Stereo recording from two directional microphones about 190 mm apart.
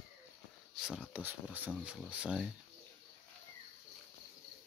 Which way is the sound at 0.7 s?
Centre (ahead or behind).